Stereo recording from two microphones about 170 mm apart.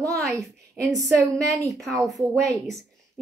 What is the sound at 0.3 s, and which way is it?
A woman's voice, 20° right (ahead or behind).